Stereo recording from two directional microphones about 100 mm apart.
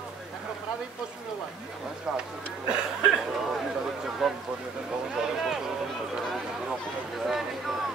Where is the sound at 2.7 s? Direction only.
10° right (ahead or behind).